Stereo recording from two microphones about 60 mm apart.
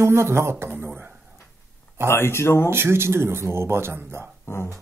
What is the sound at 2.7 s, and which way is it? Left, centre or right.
Speech, right.